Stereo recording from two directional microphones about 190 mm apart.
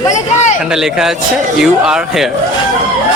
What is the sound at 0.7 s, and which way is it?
Speech, 5° right (ahead or behind).